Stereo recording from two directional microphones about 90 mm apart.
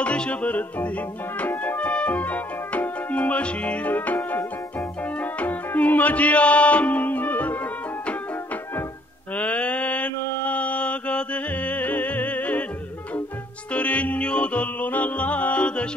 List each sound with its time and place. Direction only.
0.0 s music: 15° left (ahead or behind)
9.3 s mantra: 15° left (ahead or behind)
13.7 s music: 15° left (ahead or behind)